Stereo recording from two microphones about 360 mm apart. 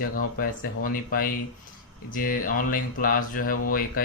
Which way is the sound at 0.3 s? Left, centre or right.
Left.